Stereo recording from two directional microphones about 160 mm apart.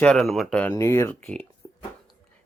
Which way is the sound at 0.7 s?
20° left (ahead or behind).